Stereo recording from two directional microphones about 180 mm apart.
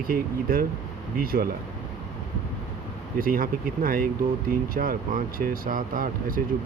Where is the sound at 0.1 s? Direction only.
55° right (ahead or behind).